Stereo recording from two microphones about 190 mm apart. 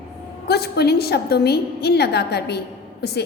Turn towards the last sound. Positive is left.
turn(degrees=60)  # may be behind; listen again after turning